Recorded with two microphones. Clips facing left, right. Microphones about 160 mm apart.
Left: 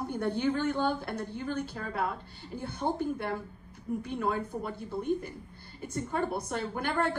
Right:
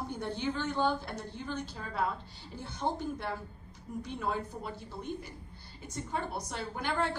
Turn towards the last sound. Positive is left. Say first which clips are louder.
# left 3 dB
turn(degrees=50)  # may be behind; listen again after turning